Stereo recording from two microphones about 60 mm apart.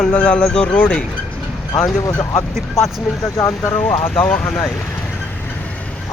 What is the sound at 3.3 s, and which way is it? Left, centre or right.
Speech, left.